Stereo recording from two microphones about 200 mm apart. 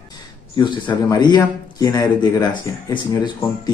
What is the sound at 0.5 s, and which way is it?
A man's voice, 20° left (ahead or behind).